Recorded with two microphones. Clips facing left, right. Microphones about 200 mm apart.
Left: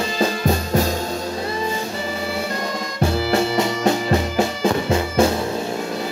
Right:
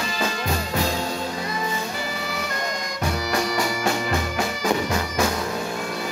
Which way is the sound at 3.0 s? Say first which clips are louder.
Left 6 dB; 25° left (ahead or behind).